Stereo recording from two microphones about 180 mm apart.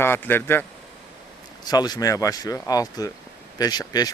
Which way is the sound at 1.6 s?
20° left (ahead or behind).